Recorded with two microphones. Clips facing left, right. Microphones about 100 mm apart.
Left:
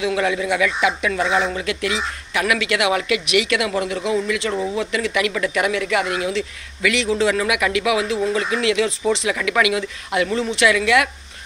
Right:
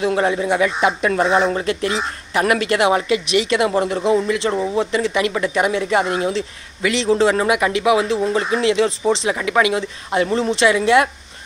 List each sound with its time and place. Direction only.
0.0 s speech: 35° right (ahead or behind)